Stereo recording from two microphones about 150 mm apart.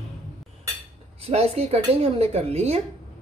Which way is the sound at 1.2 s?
45° right (ahead or behind).